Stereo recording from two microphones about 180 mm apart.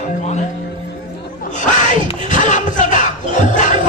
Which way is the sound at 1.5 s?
45° left (ahead or behind).